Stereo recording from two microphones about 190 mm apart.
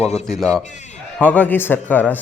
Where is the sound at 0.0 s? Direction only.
35° left (ahead or behind).